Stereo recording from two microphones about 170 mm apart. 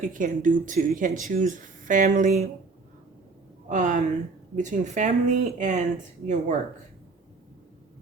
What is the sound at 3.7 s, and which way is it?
A woman's voice, 50° right (ahead or behind).